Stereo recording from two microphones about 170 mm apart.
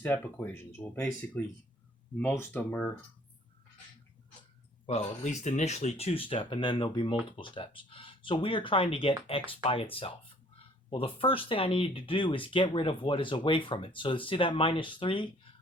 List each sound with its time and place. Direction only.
0.0 s speech: 10° left (ahead or behind)
4.9 s speech: 45° left (ahead or behind)